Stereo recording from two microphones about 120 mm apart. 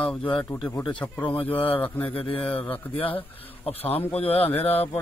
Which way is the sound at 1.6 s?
50° left (ahead or behind).